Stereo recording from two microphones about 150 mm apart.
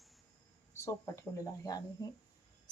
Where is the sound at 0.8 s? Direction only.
20° left (ahead or behind).